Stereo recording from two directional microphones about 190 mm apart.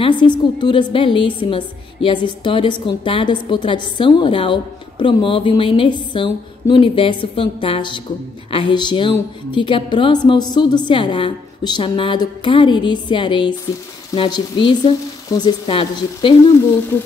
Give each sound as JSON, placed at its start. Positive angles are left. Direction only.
{"t": 0.2, "sound": "a woman's voice", "side_deg": 25}